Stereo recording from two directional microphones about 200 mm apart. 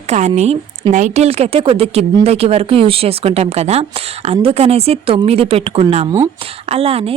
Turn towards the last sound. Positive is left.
turn(degrees=-30)  # may be behind; listen again after turning